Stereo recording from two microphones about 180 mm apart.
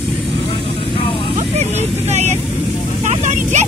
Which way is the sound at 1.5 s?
40° right (ahead or behind).